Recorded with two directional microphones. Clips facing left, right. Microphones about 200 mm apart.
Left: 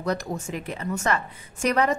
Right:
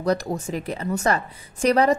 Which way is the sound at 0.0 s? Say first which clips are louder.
Right 4 dB; 35° right (ahead or behind).